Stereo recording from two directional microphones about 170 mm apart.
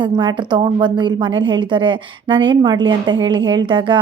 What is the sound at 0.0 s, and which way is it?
A woman's voice, 30° right (ahead or behind).